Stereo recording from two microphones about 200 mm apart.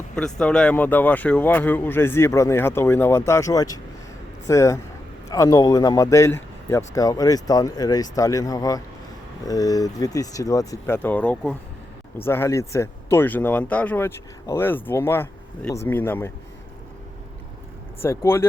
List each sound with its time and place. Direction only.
0.3 s speech: 5° left (ahead or behind)
18.0 s speech: 15° left (ahead or behind)